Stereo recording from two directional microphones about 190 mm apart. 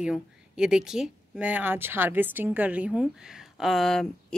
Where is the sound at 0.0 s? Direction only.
5° right (ahead or behind).